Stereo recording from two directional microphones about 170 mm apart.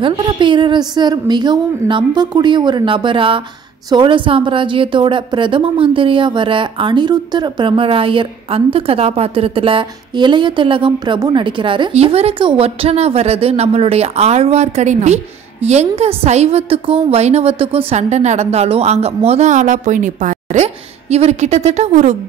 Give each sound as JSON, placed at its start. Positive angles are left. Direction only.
{"t": 0.0, "sound": "a woman's voice", "side_deg": -30}